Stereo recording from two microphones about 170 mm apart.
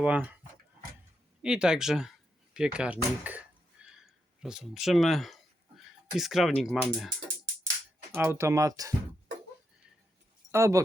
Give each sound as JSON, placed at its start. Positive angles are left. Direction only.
{"t": 0.0, "sound": "speech", "side_deg": -10}
{"t": 1.4, "sound": "a sound", "side_deg": -5}
{"t": 8.1, "sound": "speech", "side_deg": -15}
{"t": 10.5, "sound": "speech", "side_deg": -15}